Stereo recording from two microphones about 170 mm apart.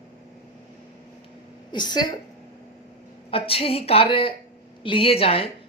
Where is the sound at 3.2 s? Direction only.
35° left (ahead or behind).